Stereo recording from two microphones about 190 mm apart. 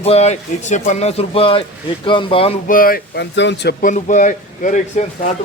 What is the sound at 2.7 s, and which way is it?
Speech, 50° left (ahead or behind).